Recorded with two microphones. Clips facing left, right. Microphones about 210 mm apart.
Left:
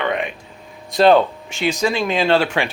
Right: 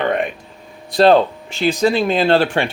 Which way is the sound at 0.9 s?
35° right (ahead or behind).